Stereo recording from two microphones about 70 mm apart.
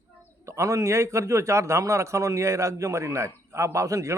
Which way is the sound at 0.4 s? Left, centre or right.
Right.